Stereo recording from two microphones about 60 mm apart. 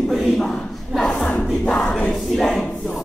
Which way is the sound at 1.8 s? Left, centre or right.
Centre.